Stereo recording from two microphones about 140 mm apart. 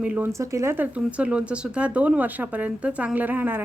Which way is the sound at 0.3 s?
20° right (ahead or behind).